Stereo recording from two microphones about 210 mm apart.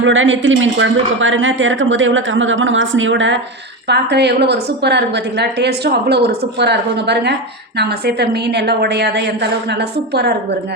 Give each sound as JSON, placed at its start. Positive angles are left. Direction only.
{"t": 0.0, "sound": "a woman's voice", "side_deg": -65}